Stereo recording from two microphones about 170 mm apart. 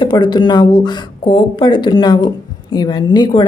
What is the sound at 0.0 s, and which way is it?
A woman's voice, 25° left (ahead or behind).